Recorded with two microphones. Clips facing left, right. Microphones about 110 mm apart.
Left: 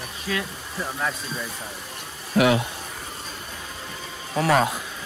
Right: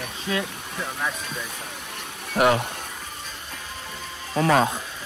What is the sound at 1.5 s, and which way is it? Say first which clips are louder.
Stream: even; 60° right (ahead or behind).